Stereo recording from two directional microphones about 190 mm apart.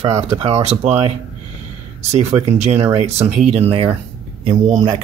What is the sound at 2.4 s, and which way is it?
Speech, 35° right (ahead or behind).